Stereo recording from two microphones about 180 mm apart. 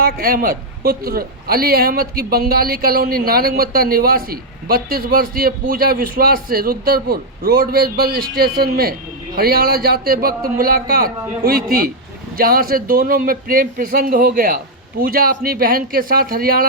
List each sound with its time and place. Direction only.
0.0 s a man's voice: 55° right (ahead or behind)